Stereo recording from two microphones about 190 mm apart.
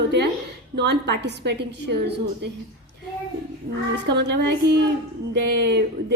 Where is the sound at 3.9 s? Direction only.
65° right (ahead or behind).